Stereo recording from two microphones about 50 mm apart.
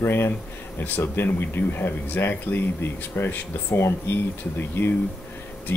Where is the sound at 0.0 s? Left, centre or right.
Left.